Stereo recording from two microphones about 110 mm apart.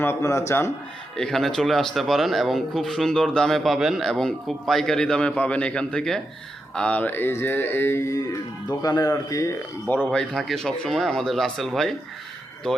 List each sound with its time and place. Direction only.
0.0 s speech: 25° left (ahead or behind)
1.1 s speech: 5° left (ahead or behind); by 9.6 s 30° left (ahead or behind)
10.1 s speech: 5° left (ahead or behind)